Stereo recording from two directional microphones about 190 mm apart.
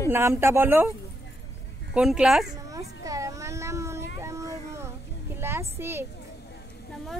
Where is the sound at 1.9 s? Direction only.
5° right (ahead or behind).